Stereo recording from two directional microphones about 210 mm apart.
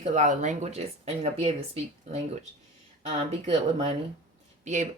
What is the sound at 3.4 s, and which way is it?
Speech, 30° right (ahead or behind).